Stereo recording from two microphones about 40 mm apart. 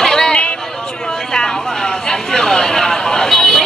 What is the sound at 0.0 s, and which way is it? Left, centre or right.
Music, centre.